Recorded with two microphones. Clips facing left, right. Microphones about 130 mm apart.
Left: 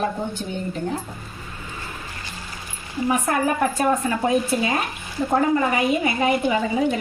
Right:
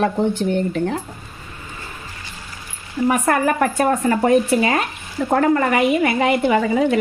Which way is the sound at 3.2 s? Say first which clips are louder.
Right 3 dB; 65° right (ahead or behind).